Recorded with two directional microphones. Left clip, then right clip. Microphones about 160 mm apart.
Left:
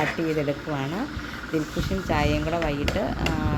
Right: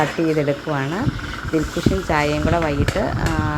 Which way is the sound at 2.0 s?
10° right (ahead or behind).